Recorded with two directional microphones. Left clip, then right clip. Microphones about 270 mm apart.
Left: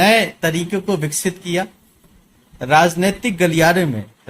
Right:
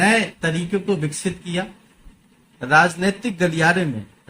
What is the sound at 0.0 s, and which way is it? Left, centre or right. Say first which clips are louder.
Speech: left 4 dB; left.